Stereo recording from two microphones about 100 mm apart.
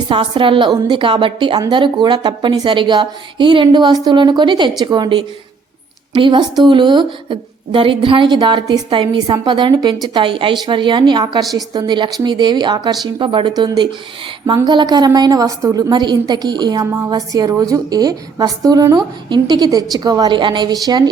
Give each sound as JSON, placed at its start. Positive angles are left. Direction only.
{"t": 0.1, "sound": "a woman's voice", "side_deg": -60}
{"t": 13.1, "sound": "a woman's voice", "side_deg": -60}
{"t": 14.4, "sound": "a woman's voice", "side_deg": -45}